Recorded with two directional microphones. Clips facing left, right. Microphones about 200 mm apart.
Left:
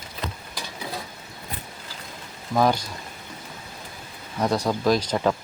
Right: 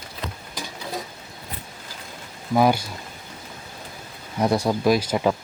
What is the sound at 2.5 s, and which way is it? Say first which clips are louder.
Speech: right 2 dB; 10° right (ahead or behind).